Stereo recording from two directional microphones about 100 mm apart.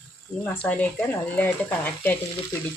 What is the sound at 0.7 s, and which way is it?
Speech, 20° left (ahead or behind).